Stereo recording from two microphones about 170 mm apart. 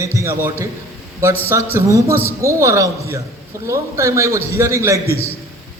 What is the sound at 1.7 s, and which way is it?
A man's voice, 15° right (ahead or behind).